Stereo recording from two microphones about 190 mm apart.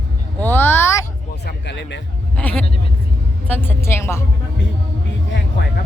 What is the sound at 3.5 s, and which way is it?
Music, 10° left (ahead or behind).